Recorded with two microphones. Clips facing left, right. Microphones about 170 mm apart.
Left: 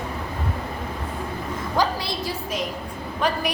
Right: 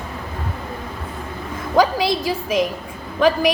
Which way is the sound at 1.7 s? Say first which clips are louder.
Right 8 dB; 90° right.